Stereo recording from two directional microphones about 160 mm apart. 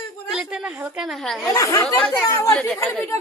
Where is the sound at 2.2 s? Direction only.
15° left (ahead or behind).